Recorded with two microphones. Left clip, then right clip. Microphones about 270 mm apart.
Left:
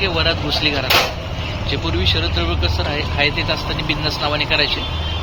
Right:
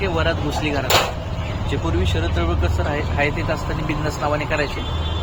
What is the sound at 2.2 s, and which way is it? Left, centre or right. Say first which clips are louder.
Speech: left 3 dB; centre.